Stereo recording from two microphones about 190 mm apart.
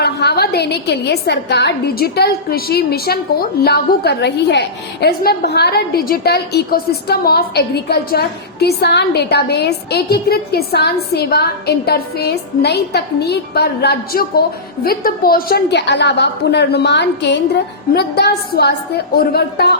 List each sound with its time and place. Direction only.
0.0 s a woman's voice: 60° left (ahead or behind)